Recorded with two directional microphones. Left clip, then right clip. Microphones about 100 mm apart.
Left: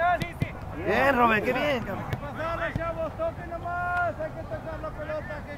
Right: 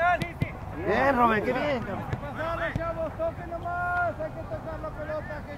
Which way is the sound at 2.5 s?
Centre (ahead or behind).